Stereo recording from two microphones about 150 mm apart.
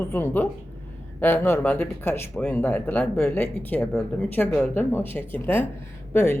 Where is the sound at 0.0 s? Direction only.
15° left (ahead or behind).